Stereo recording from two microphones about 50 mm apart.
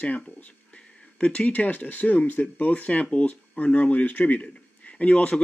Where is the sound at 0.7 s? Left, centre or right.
Centre.